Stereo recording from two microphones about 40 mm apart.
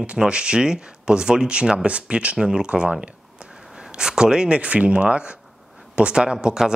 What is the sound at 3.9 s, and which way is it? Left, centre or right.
Speech, centre.